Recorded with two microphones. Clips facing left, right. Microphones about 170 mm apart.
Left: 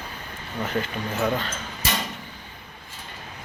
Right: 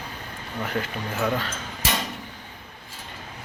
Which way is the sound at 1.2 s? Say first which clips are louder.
Left 1 dB; 10° left (ahead or behind).